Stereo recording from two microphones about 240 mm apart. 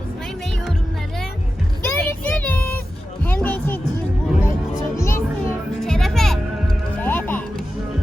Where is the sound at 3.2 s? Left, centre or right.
Centre.